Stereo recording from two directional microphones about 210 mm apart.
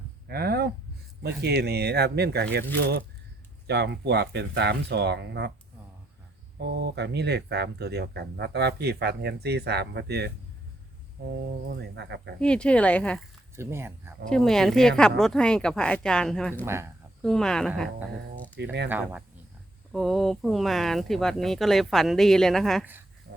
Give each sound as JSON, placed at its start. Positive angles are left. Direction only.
{"t": 0.3, "sound": "a sound", "side_deg": -50}
{"t": 1.2, "sound": "speech", "side_deg": -50}
{"t": 6.6, "sound": "speech", "side_deg": -50}
{"t": 11.8, "sound": "speech", "side_deg": -55}
{"t": 12.4, "sound": "speech", "side_deg": 5}
{"t": 13.6, "sound": "speech", "side_deg": -10}
{"t": 14.3, "sound": "speech", "side_deg": 0}
{"t": 18.5, "sound": "speech", "side_deg": -55}
{"t": 18.9, "sound": "speech", "side_deg": -10}